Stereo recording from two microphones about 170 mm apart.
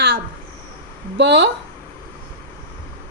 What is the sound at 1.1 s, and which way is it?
Speech, 85° right.